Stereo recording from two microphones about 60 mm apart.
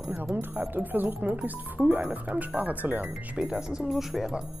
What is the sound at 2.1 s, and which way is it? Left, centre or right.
Speech, right.